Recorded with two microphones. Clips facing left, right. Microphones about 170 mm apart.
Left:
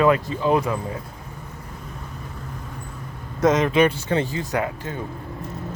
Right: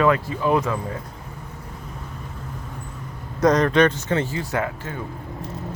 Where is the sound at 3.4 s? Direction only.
5° left (ahead or behind).